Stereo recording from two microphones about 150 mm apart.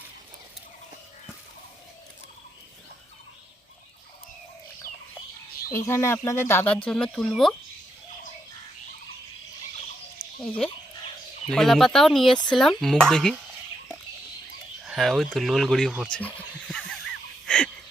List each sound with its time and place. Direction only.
5.7 s speech: 20° left (ahead or behind); by 7.5 s centre (ahead or behind)
11.4 s speech: centre (ahead or behind)
14.8 s speech: centre (ahead or behind)
16.2 s a sound: 5° left (ahead or behind)